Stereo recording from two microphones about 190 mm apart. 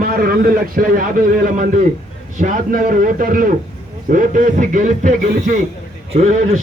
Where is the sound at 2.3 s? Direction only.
45° right (ahead or behind).